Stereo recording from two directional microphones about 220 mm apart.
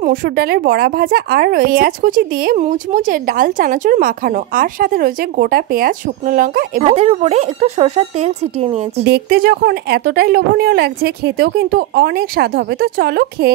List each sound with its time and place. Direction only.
0.0 s a woman's voice: 40° right (ahead or behind)
9.0 s speech: 45° right (ahead or behind)